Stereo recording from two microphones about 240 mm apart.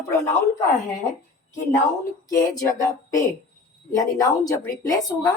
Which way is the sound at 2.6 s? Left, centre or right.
Centre.